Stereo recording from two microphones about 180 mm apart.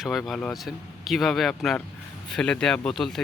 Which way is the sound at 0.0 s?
Centre (ahead or behind).